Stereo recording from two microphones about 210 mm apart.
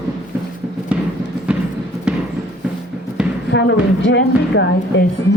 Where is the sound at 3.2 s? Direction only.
5° right (ahead or behind).